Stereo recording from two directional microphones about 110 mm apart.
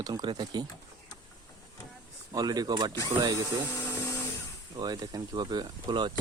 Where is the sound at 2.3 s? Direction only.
35° right (ahead or behind).